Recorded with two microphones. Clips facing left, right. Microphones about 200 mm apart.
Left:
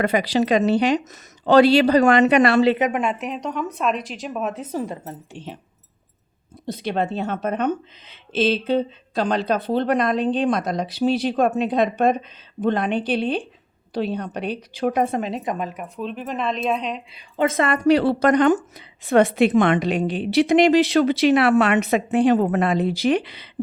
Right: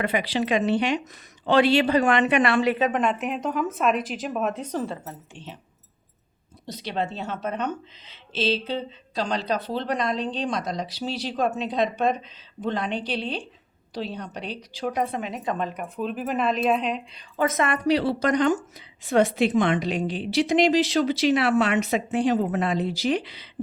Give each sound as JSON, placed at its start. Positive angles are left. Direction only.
{"t": 0.0, "sound": "speech", "side_deg": 40}
{"t": 2.7, "sound": "a woman's voice", "side_deg": 15}
{"t": 3.0, "sound": "a woman's voice", "side_deg": 5}
{"t": 6.7, "sound": "a woman's voice", "side_deg": 50}
{"t": 15.4, "sound": "a woman's voice", "side_deg": 5}
{"t": 17.3, "sound": "a woman's voice", "side_deg": 25}